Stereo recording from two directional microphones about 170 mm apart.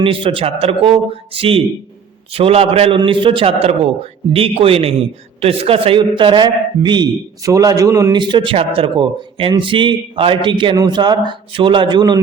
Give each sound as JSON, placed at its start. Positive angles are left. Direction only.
{"t": 0.0, "sound": "a man's voice", "side_deg": -30}